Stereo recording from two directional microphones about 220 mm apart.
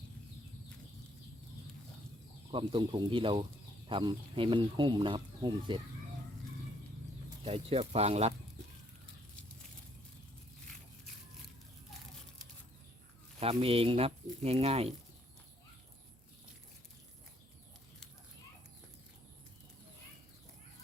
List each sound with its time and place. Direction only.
2.5 s speech: 20° right (ahead or behind)
7.4 s speech: 25° right (ahead or behind)
13.4 s speech: 25° right (ahead or behind)